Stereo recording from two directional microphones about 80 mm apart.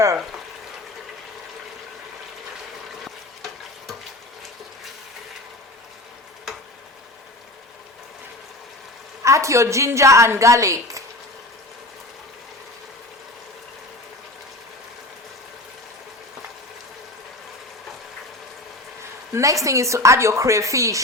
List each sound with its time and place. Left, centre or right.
9.2 s a woman's voice: right
19.3 s a woman's voice: right